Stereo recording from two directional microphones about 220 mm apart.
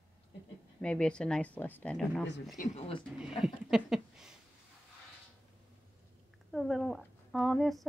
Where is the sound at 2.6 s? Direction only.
25° left (ahead or behind).